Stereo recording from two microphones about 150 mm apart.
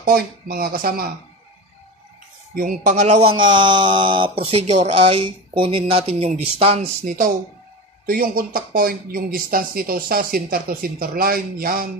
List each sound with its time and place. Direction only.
0.0 s speech: 80° right
2.5 s speech: 65° right (ahead or behind); by 7.2 s 45° right (ahead or behind)
8.1 s speech: 75° right (ahead or behind)